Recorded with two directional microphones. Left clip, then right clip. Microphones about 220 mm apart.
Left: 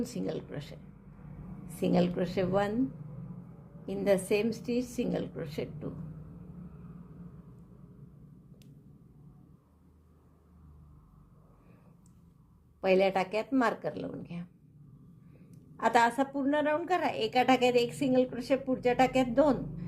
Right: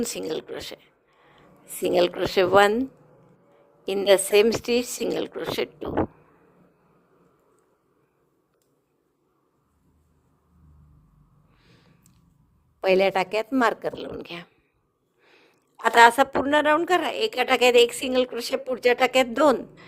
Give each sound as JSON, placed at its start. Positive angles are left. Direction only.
{"t": 0.0, "sound": "a woman's voice", "side_deg": -40}
{"t": 1.9, "sound": "a woman's voice", "side_deg": -40}
{"t": 3.8, "sound": "a woman's voice", "side_deg": -40}
{"t": 12.8, "sound": "a woman's voice", "side_deg": -40}
{"t": 15.8, "sound": "a woman's voice", "side_deg": -35}